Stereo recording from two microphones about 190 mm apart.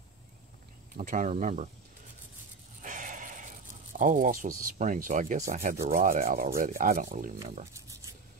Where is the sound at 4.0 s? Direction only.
45° right (ahead or behind).